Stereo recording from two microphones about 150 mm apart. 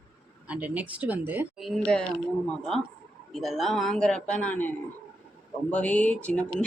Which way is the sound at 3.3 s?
Centre (ahead or behind).